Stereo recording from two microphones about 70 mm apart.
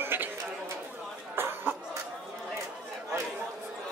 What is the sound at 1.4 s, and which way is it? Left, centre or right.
Cough, right.